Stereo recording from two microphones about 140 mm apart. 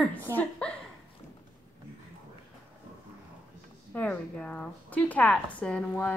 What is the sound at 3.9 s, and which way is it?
Speech, 10° left (ahead or behind).